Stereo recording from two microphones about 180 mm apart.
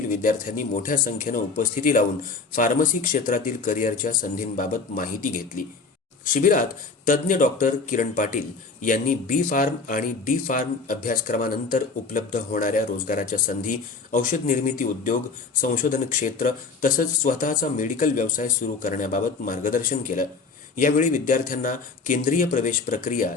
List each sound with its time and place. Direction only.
0.1 s speech: 50° left (ahead or behind)